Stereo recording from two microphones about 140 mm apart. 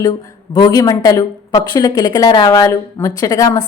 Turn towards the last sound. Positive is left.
turn(degrees=25)  # may be behind; listen again after turning